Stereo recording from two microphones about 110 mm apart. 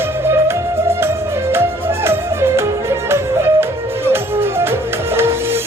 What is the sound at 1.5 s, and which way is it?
Music, 20° right (ahead or behind).